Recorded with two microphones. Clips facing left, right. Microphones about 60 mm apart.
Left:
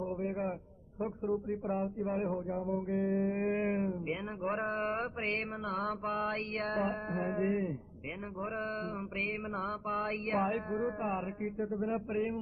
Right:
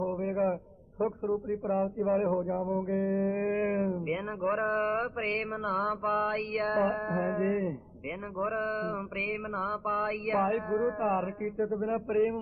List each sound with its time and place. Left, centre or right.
0.0 s a sound: right
0.9 s a man's voice: right
1.5 s music: right